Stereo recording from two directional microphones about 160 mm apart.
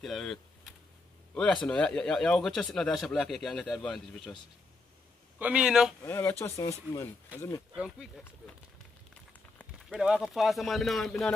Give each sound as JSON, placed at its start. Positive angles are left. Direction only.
{"t": 0.0, "sound": "speech", "side_deg": 0}
{"t": 5.4, "sound": "speech", "side_deg": -5}
{"t": 6.0, "sound": "speech", "side_deg": 15}
{"t": 7.7, "sound": "speech", "side_deg": -5}
{"t": 9.6, "sound": "a sound", "side_deg": 5}
{"t": 10.0, "sound": "speech", "side_deg": -5}